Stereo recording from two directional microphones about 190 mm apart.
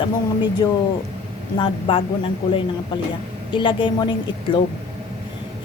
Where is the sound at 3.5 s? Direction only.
25° left (ahead or behind).